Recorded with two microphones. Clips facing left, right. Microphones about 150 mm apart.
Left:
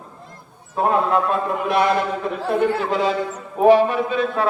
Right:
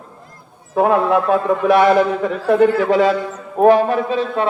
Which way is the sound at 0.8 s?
90° right.